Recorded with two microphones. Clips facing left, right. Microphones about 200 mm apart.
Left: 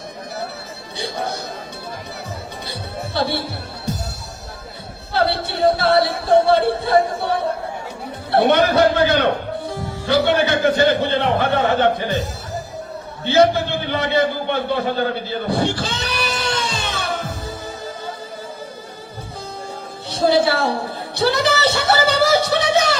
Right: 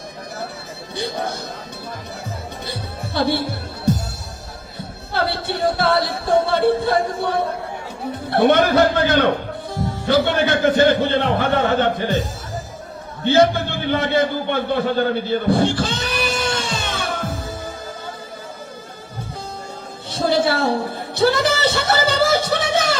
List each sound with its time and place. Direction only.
0.9 s a man's voice: 50° right (ahead or behind)
3.2 s music: 50° right (ahead or behind)
5.7 s music: 50° right (ahead or behind)
8.3 s a man's voice: 50° right (ahead or behind)
13.2 s a man's voice: 50° right (ahead or behind)
20.1 s a woman's voice: 50° right (ahead or behind)
21.2 s a sound: 50° right (ahead or behind)